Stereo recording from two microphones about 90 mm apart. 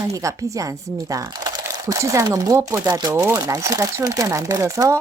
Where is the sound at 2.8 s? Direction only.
50° right (ahead or behind).